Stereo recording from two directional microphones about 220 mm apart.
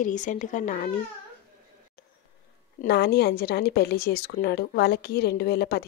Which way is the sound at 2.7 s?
45° left (ahead or behind).